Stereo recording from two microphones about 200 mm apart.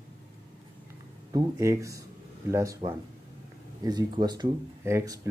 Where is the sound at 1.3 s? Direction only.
15° right (ahead or behind).